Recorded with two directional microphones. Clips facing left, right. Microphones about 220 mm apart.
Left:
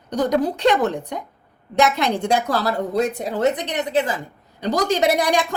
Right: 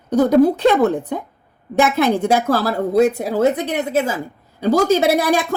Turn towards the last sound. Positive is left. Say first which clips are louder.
# right 4 dB
turn(degrees=-5)  # may be behind; listen again after turning